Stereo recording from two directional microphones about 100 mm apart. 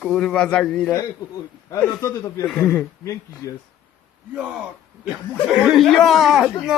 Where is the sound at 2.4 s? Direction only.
5° left (ahead or behind).